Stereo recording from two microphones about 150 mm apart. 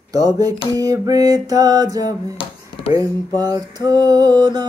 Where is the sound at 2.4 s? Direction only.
35° left (ahead or behind).